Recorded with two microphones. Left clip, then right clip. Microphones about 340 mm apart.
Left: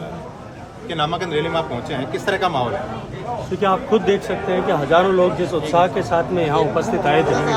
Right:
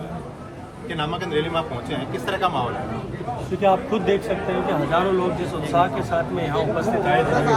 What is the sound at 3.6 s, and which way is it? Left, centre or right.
Speech, centre.